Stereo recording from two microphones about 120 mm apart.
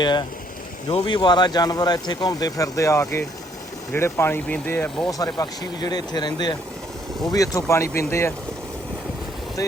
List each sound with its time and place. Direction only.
0.0 s speech: 40° left (ahead or behind); by 5.0 s 15° left (ahead or behind)
5.0 s speech: 30° left (ahead or behind)
9.6 s speech: 30° left (ahead or behind)